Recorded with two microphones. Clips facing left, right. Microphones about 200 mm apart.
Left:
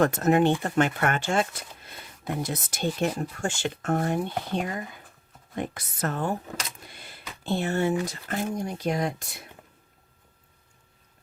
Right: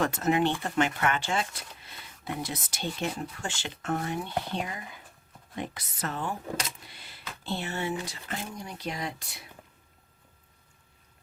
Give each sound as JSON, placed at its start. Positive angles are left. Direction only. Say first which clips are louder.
{"t": 0.0, "sound": "speech", "louder": "left 5 dB", "side_deg": 50}